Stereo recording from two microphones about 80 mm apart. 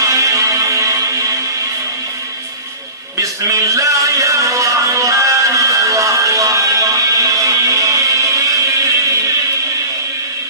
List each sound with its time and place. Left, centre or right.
0.0 s music: right
3.2 s music: right